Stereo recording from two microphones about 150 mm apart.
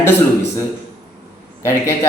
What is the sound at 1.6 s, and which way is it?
Speech, 15° left (ahead or behind).